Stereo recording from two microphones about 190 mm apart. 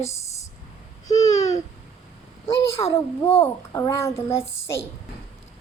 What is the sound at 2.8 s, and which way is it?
Speech, 25° left (ahead or behind).